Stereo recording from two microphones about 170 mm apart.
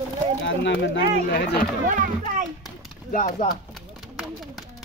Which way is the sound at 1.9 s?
50° right (ahead or behind).